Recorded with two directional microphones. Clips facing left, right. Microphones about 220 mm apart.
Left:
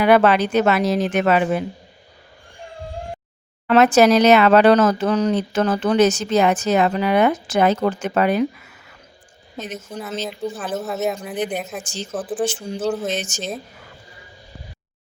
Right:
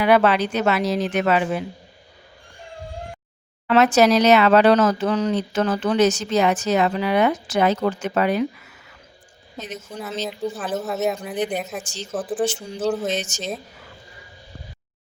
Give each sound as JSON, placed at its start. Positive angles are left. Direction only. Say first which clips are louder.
{"t": 0.0, "sound": "speech", "louder": "left 2 dB", "side_deg": 50}
{"t": 3.7, "sound": "speech", "louder": "left 2 dB", "side_deg": 50}
{"t": 9.6, "sound": "speech", "louder": "left 1 dB", "side_deg": 0}